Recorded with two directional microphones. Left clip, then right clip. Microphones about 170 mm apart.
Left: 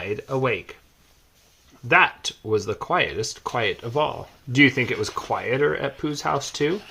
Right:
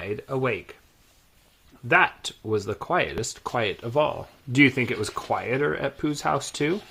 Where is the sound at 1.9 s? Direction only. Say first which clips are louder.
Left 3 dB; 30° right (ahead or behind).